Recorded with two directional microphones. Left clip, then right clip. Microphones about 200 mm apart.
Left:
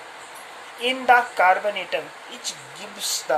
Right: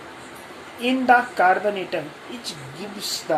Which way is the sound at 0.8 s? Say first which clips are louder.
Even; 25° left (ahead or behind).